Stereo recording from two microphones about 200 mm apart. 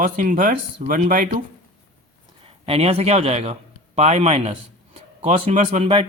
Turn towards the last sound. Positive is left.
turn(degrees=-30)  # may be behind; listen again after turning